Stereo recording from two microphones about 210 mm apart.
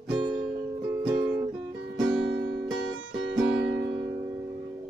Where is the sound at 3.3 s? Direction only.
5° right (ahead or behind).